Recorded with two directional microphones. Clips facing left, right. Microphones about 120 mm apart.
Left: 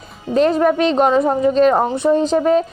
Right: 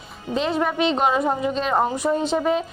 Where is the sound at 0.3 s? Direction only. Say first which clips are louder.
Left 8 dB; 45° left (ahead or behind).